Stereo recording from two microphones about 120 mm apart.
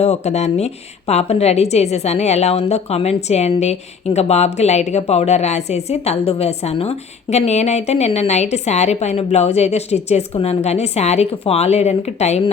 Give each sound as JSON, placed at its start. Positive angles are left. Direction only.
{"t": 0.0, "sound": "speech", "side_deg": 65}